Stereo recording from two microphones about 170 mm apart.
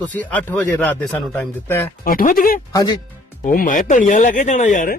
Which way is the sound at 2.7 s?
25° left (ahead or behind).